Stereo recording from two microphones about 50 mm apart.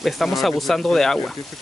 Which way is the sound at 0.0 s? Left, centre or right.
Centre.